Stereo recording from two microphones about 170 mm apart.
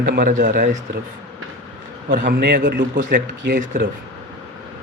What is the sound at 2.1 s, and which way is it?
A man's voice, 55° right (ahead or behind).